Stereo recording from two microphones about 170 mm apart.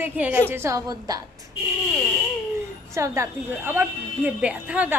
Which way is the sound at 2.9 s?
15° right (ahead or behind).